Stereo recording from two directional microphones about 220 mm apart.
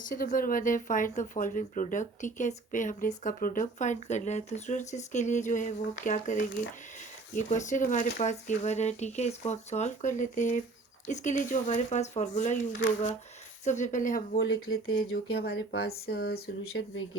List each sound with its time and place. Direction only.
0.1 s speech: 40° left (ahead or behind)
13.7 s speech: 35° left (ahead or behind)
14.3 s speech: 65° left (ahead or behind)
14.9 s speech: 45° left (ahead or behind)